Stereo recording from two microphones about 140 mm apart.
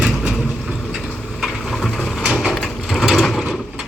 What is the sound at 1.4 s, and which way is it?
Mechanisms, centre (ahead or behind).